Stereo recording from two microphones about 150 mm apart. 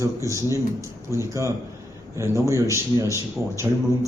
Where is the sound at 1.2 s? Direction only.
20° right (ahead or behind).